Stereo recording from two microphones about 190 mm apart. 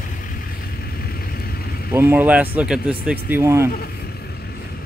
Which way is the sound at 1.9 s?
10° right (ahead or behind).